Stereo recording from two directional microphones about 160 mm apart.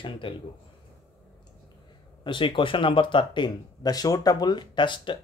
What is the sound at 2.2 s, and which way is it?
Speech, 30° left (ahead or behind).